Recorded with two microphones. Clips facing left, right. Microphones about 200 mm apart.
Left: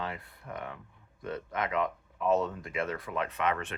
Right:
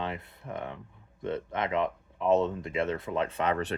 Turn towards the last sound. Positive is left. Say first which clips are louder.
# right 3 dB
turn(degrees=-35)  # may be behind; listen again after turning